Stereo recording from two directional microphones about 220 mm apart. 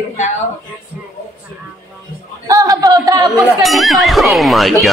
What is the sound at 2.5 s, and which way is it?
Speech, 15° right (ahead or behind).